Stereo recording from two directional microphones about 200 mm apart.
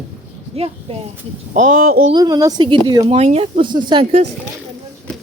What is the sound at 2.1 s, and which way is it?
Speech, 20° right (ahead or behind).